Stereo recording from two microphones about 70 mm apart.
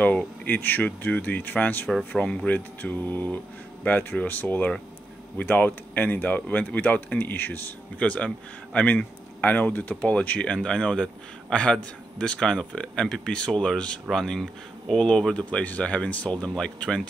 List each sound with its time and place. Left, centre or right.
0.0 s speech: left